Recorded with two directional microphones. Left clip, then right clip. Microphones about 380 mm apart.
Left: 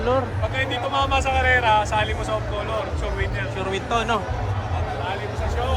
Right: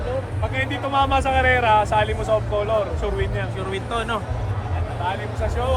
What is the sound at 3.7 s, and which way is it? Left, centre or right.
Speech, centre.